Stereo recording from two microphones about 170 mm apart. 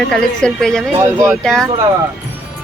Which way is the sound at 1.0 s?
15° right (ahead or behind).